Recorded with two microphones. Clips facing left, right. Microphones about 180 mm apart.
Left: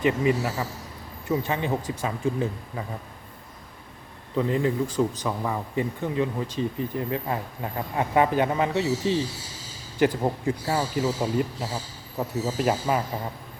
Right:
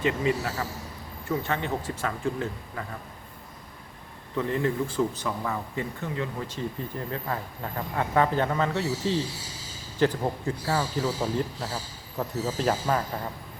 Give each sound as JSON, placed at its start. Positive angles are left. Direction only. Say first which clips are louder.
{"t": 0.0, "sound": "speech", "louder": "left 3 dB", "side_deg": 15}
{"t": 4.4, "sound": "speech", "louder": "left 2 dB", "side_deg": 15}